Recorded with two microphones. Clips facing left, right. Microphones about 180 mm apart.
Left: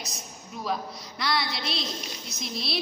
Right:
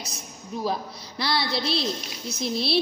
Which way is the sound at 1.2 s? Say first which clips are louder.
Right 3 dB; 30° right (ahead or behind).